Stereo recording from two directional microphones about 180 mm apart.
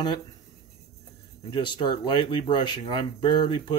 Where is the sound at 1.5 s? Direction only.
25° left (ahead or behind).